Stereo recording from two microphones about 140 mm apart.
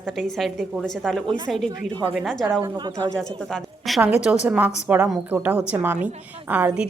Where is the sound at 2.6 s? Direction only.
30° right (ahead or behind).